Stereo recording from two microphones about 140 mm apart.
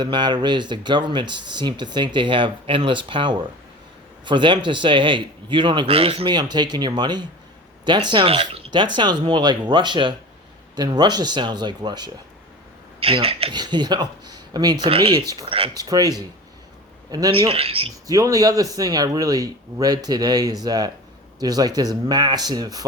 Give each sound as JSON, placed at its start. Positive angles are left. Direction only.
{"t": 0.0, "sound": "speech", "side_deg": -30}
{"t": 13.0, "sound": "speech", "side_deg": -45}
{"t": 14.8, "sound": "speech", "side_deg": -40}
{"t": 15.7, "sound": "a man's voice", "side_deg": -25}
{"t": 17.5, "sound": "speech", "side_deg": -45}
{"t": 18.1, "sound": "speech", "side_deg": -25}